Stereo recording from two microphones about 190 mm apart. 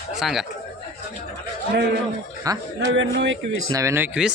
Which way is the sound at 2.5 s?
20° right (ahead or behind).